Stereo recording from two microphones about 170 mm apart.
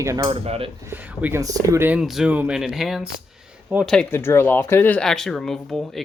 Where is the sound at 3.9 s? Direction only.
10° left (ahead or behind).